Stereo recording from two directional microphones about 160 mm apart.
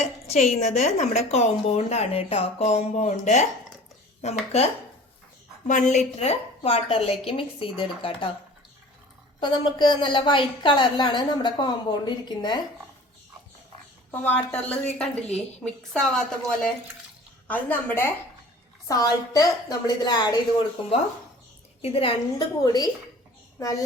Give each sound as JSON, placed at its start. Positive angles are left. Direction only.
{"t": 0.0, "sound": "speech", "side_deg": 45}
{"t": 9.4, "sound": "a woman's voice", "side_deg": 30}
{"t": 14.1, "sound": "a woman's voice", "side_deg": 10}
{"t": 18.9, "sound": "a woman's voice", "side_deg": 20}
{"t": 21.8, "sound": "speech", "side_deg": 40}
{"t": 22.6, "sound": "a woman's voice", "side_deg": 25}